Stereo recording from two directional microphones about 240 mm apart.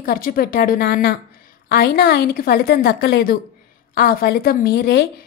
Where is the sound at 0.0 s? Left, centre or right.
Left.